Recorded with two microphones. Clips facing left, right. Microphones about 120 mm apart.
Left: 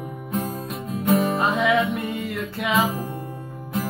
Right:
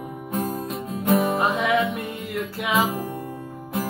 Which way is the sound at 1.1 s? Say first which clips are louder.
Even; 25° right (ahead or behind).